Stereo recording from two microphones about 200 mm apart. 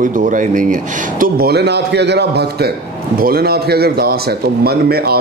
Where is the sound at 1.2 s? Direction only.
50° right (ahead or behind).